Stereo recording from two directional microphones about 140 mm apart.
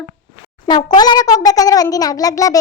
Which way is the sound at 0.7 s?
30° left (ahead or behind).